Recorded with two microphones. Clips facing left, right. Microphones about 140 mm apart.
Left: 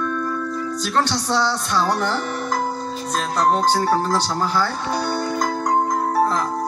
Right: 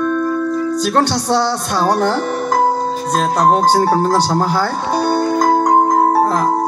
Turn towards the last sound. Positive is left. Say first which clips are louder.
# right 7 dB
turn(degrees=-45)  # may be behind; listen again after turning